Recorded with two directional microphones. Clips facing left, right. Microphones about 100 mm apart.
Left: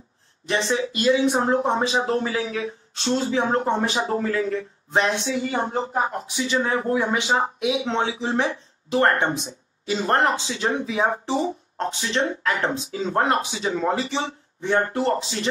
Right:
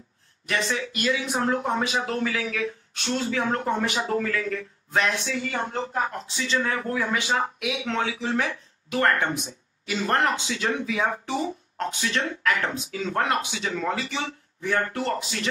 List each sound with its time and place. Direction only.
0.5 s speech: 25° left (ahead or behind)